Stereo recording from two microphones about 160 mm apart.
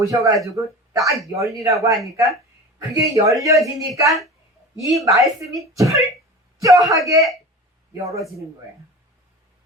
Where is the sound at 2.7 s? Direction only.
20° right (ahead or behind).